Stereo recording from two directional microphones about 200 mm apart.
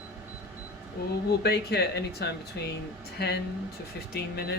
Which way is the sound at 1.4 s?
55° left (ahead or behind).